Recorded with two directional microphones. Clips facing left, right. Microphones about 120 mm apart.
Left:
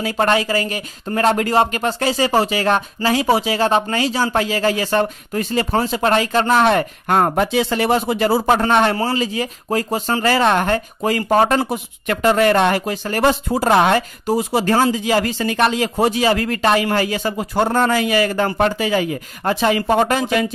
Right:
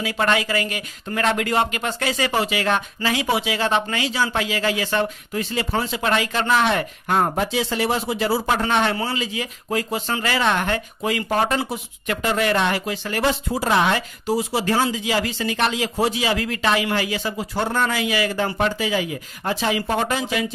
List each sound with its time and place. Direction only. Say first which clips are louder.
0.0 s speech: left 4 dB; 35° left (ahead or behind); by 20.4 s 55° left (ahead or behind)